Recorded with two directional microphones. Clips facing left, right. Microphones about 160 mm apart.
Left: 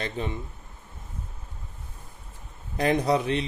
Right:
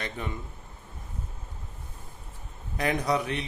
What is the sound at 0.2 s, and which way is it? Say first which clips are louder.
Speech: left 6 dB; 30° left (ahead or behind).